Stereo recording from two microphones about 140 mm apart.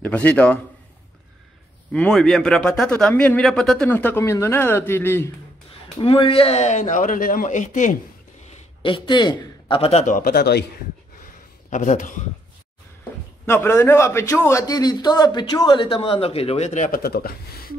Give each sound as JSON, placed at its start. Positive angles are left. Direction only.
{"t": 0.0, "sound": "a man's voice", "side_deg": 10}
{"t": 1.9, "sound": "a man's voice", "side_deg": 5}
{"t": 5.9, "sound": "speech", "side_deg": 40}
{"t": 8.8, "sound": "a man's voice", "side_deg": 35}
{"t": 10.0, "sound": "speech", "side_deg": 70}
{"t": 11.7, "sound": "speech", "side_deg": 65}
{"t": 13.5, "sound": "a man's voice", "side_deg": 15}